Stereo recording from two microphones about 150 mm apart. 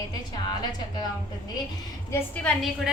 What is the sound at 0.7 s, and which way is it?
Speech, 30° left (ahead or behind).